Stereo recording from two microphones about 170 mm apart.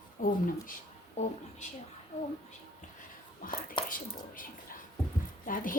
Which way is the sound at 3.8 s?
55° left (ahead or behind).